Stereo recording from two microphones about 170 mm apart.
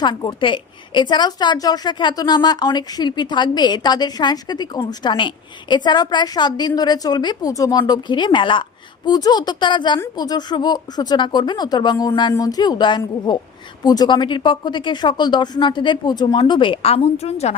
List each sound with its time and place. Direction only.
0.0 s a woman's voice: 25° left (ahead or behind)